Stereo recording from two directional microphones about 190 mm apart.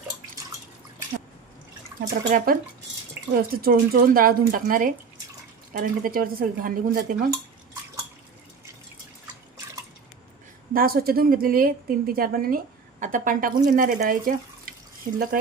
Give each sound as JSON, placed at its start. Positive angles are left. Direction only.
{"t": 2.0, "sound": "a woman's voice", "side_deg": -50}
{"t": 3.2, "sound": "drip", "side_deg": -15}
{"t": 3.5, "sound": "a woman's voice", "side_deg": -50}
{"t": 10.8, "sound": "a woman's voice", "side_deg": -50}